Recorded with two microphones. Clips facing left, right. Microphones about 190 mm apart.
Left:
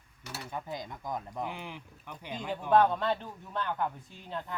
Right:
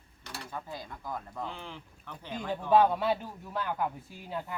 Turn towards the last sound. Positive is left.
turn(degrees=-5)  # may be behind; listen again after turning